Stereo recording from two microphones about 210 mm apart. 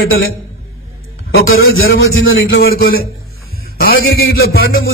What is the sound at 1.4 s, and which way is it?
A man's voice, 75° left (ahead or behind).